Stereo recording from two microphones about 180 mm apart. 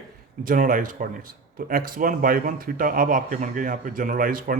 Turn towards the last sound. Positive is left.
turn(degrees=-50)  # may be behind; listen again after turning